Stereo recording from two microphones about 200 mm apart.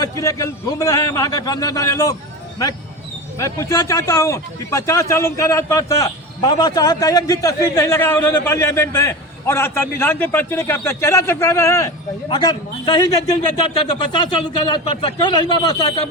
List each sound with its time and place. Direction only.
0.0 s a man's voice: 15° left (ahead or behind)
3.3 s a man's voice: 15° left (ahead or behind)